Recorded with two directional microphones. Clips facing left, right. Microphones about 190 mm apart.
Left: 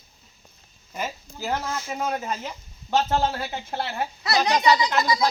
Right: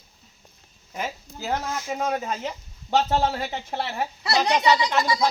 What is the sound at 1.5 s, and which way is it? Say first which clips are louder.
Speech: right 1 dB; 15° right (ahead or behind).